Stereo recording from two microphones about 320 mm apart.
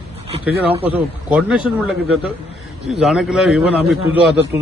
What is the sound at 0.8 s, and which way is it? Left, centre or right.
Speech, centre.